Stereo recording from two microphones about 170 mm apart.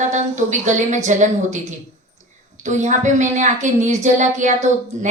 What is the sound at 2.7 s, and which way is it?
A woman's voice, 45° right (ahead or behind).